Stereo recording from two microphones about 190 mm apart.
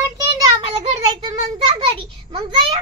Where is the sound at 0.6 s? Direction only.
25° right (ahead or behind).